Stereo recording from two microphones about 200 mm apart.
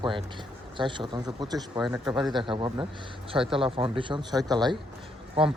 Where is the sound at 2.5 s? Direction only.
25° right (ahead or behind).